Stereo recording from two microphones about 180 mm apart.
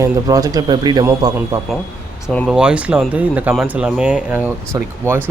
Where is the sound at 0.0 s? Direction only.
20° right (ahead or behind).